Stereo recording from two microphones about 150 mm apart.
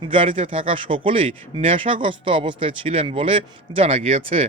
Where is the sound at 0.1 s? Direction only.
40° right (ahead or behind).